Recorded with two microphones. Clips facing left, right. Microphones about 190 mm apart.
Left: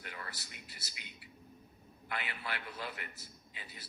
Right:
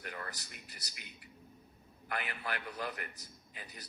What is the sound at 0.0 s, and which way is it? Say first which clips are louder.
A man's voice: right 3 dB; 45° right (ahead or behind).